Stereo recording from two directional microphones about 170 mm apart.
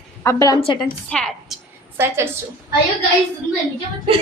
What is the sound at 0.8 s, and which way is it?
Speech, 5° left (ahead or behind).